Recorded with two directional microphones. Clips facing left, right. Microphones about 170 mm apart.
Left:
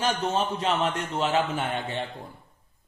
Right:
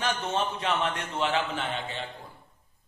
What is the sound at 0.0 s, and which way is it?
A man's voice, 35° left (ahead or behind).